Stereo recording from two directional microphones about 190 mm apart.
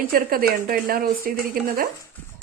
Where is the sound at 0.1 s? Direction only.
50° right (ahead or behind).